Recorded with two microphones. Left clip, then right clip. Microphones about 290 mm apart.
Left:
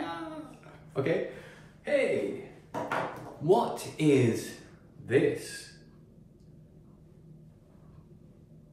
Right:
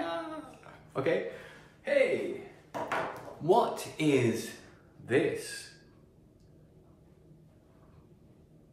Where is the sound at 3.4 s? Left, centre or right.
Centre.